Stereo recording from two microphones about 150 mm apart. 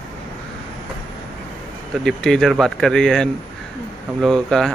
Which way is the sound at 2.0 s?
5° left (ahead or behind).